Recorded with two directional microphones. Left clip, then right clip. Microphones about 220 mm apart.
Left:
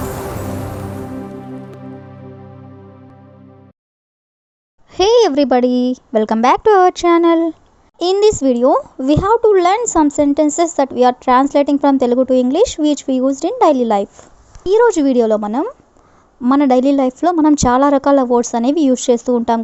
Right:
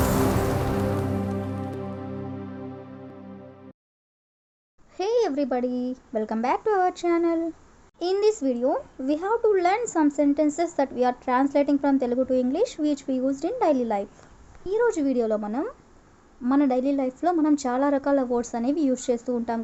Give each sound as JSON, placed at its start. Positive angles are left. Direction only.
{"t": 4.9, "sound": "speech", "side_deg": 40}